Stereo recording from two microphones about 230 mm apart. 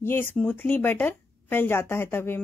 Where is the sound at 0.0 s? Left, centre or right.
Centre.